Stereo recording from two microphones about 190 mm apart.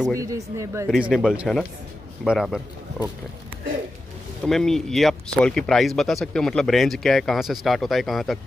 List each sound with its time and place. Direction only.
0.1 s a man's voice: 15° right (ahead or behind)
0.8 s speech: centre (ahead or behind)
4.5 s speech: centre (ahead or behind)